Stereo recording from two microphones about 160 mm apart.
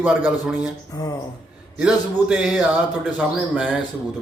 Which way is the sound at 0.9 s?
25° left (ahead or behind).